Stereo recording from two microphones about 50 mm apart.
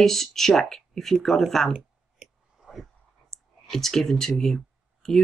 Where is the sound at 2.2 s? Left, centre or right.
Right.